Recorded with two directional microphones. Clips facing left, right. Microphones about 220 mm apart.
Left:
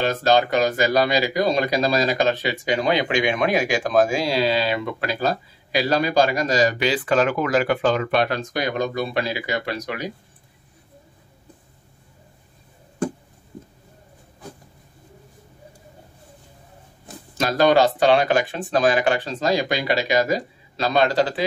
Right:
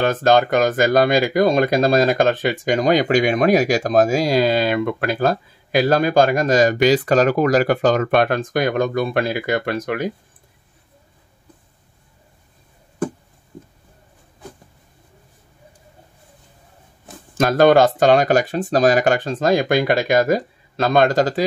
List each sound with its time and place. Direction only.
0.0 s speech: 50° right (ahead or behind)
17.3 s speech: 50° right (ahead or behind)